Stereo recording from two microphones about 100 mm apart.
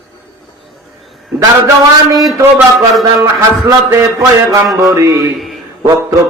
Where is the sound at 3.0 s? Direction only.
35° right (ahead or behind).